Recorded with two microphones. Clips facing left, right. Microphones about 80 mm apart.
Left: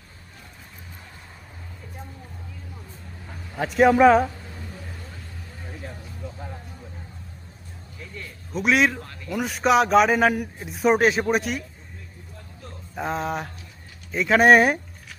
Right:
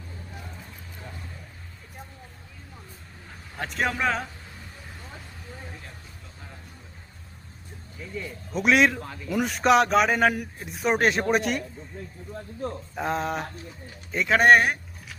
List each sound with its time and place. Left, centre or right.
3.5 s a man's voice: centre
8.1 s a man's voice: centre
12.6 s music: right
13.0 s a man's voice: centre